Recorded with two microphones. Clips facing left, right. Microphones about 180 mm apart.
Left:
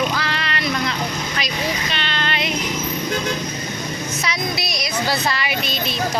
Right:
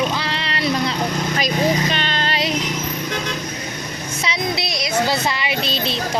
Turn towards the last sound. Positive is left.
turn(degrees=-30)  # may be behind; listen again after turning